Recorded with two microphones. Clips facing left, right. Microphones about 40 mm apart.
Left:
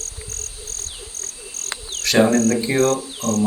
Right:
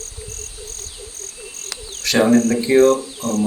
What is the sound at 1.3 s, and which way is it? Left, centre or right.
Cricket, right.